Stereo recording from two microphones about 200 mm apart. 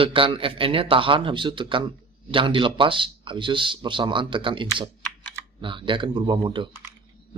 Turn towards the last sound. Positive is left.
turn(degrees=-25)  # may be behind; listen again after turning